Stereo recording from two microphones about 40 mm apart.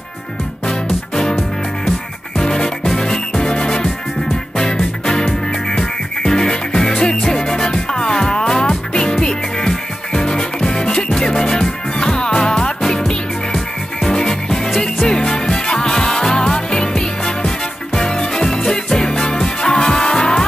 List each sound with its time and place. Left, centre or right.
0.7 s music: centre
4.7 s music: centre
14.0 s music: centre